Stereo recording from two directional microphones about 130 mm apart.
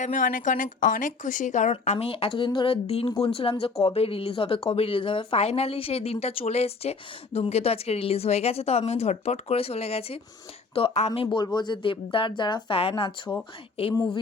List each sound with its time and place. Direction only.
0.0 s speech: 90° left; by 2.0 s 65° left (ahead or behind)
2.0 s speech: 45° left (ahead or behind)